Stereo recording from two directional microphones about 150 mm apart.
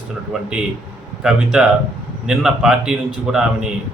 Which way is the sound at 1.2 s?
5° right (ahead or behind).